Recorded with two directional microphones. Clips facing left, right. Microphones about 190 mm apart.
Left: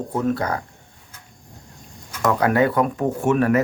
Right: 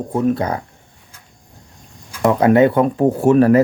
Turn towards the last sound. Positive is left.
turn(degrees=-35)  # may be behind; listen again after turning